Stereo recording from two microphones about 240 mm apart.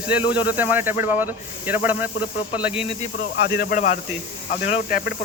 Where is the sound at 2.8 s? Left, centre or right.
Left.